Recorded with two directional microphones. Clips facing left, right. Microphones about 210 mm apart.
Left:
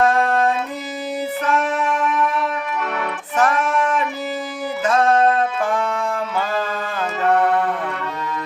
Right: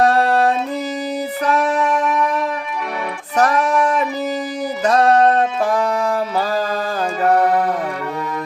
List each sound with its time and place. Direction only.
0.0 s music: 35° right (ahead or behind)
3.3 s music: 40° right (ahead or behind)